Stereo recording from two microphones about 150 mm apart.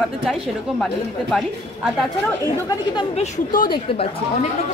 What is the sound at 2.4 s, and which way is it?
Speech, 25° left (ahead or behind).